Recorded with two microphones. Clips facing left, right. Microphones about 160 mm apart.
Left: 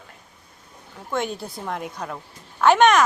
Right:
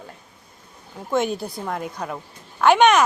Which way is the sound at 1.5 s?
Centre (ahead or behind).